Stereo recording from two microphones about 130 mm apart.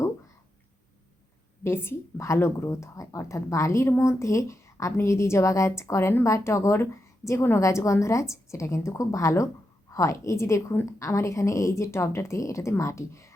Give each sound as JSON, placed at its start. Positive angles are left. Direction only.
{"t": 1.6, "sound": "a woman's voice", "side_deg": 20}